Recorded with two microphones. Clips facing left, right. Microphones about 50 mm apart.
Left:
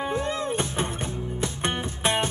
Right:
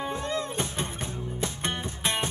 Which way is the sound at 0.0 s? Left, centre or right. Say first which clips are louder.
Left 3 dB; centre.